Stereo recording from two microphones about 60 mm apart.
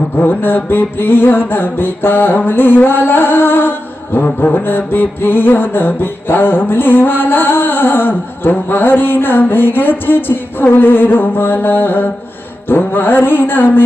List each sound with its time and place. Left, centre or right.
0.2 s music: left